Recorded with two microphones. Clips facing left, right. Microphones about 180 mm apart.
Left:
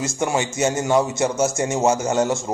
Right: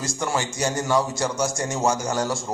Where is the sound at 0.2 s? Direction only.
20° left (ahead or behind).